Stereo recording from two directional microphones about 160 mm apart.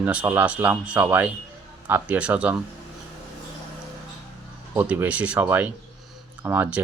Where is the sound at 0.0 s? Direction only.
10° right (ahead or behind).